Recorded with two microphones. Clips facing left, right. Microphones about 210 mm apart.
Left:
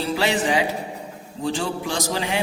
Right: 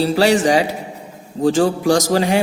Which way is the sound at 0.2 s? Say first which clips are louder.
Right 7 dB; 40° right (ahead or behind).